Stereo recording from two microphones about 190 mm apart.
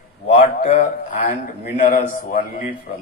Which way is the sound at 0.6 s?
40° left (ahead or behind).